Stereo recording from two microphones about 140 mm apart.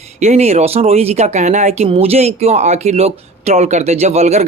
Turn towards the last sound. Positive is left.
turn(degrees=-50)  # may be behind; listen again after turning